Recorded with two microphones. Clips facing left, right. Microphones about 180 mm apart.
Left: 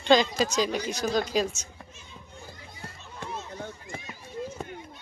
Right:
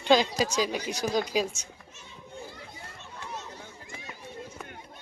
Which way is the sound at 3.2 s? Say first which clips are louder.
Left 5 dB; 55° left (ahead or behind).